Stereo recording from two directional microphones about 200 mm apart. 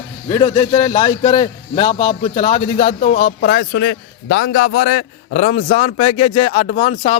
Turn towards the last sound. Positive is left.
turn(degrees=35)  # may be behind; listen again after turning